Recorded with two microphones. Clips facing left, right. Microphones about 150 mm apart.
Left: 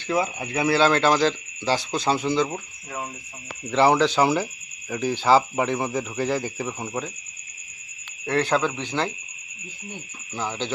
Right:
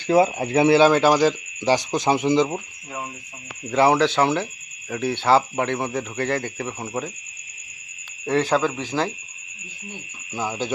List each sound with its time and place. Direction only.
0.1 s speech: 30° right (ahead or behind)
0.8 s speech: 10° right (ahead or behind)
3.7 s speech: centre (ahead or behind)
8.3 s speech: 5° right (ahead or behind)
10.3 s speech: 10° right (ahead or behind)